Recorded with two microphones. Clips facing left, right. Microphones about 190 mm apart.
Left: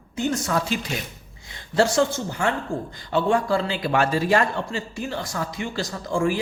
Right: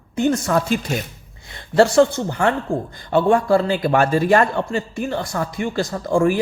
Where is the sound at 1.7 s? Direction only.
60° right (ahead or behind).